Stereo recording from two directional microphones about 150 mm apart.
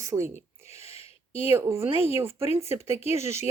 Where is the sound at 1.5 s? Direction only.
15° right (ahead or behind).